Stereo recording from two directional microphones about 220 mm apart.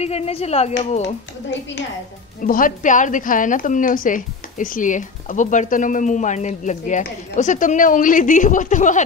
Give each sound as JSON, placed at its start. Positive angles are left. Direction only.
{"t": 0.0, "sound": "speech", "side_deg": 30}
{"t": 2.4, "sound": "a woman's voice", "side_deg": 40}